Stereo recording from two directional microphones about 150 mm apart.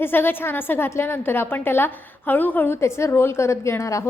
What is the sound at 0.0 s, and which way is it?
A woman's voice, 15° left (ahead or behind).